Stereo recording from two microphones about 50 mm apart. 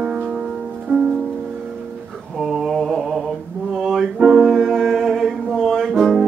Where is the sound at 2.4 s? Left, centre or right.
Centre.